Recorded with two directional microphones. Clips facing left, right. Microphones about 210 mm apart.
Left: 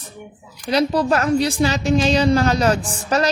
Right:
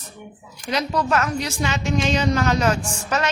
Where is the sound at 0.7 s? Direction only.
35° left (ahead or behind).